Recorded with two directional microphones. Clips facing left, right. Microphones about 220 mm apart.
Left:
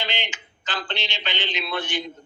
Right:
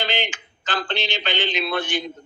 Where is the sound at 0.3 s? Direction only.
55° right (ahead or behind).